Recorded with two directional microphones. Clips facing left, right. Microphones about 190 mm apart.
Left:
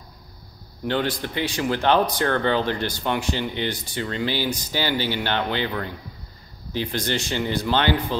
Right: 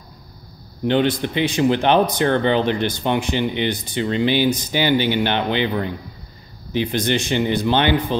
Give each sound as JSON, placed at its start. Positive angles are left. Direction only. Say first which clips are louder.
{"t": 0.8, "sound": "speech", "louder": "right 6 dB", "side_deg": -20}